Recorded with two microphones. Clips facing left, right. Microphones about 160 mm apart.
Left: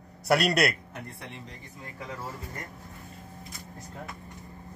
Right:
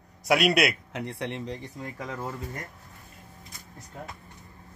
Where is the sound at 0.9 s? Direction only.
90° right.